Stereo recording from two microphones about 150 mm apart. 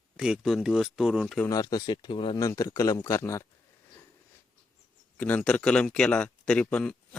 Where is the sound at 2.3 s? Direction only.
20° left (ahead or behind).